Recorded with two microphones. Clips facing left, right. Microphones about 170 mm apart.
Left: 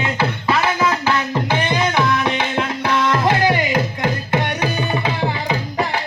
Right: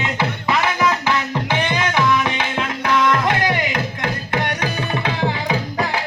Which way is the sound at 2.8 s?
30° left (ahead or behind).